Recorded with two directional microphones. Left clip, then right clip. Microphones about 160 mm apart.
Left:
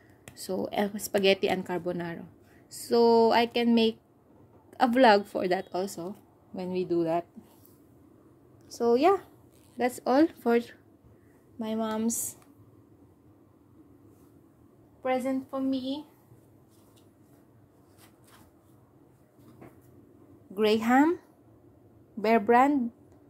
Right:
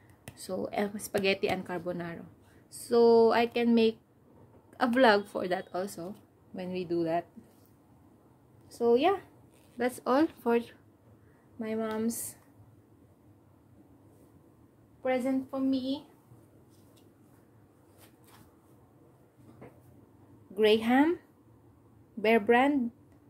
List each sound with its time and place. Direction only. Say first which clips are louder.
0.4 s speech: left 3 dB; 30° left (ahead or behind)
8.7 s speech: left 2 dB; 35° left (ahead or behind)
9.8 s speech: left 3 dB; 15° left (ahead or behind)
15.0 s speech: left 1 dB; 30° left (ahead or behind)
20.5 s speech: left 1 dB; 25° left (ahead or behind)
22.2 s speech: left 2 dB; 20° left (ahead or behind)